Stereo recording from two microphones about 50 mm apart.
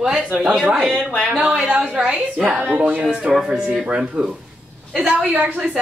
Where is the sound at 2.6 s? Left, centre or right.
Right.